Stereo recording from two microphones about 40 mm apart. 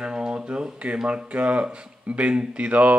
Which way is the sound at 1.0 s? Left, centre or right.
Right.